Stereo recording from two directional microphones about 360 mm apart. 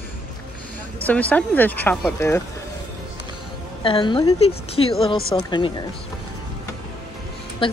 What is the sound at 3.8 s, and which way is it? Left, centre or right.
A woman's voice, centre.